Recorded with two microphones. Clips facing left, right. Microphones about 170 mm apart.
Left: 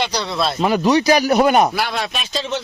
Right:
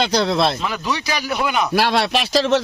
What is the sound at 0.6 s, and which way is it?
Speech, 45° left (ahead or behind).